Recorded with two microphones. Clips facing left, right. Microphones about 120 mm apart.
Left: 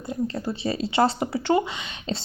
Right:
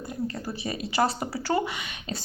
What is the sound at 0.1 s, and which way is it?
A woman's voice, 25° left (ahead or behind).